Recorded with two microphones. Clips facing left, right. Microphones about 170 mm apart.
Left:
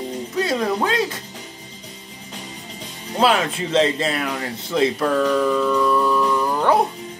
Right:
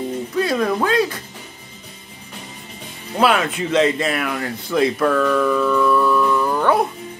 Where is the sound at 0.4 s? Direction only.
25° left (ahead or behind).